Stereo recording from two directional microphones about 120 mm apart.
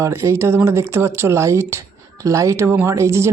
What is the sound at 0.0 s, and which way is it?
Speech, 25° right (ahead or behind).